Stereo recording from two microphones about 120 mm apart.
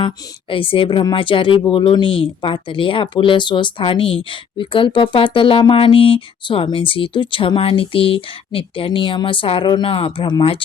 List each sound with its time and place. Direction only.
0.5 s speech: 45° left (ahead or behind)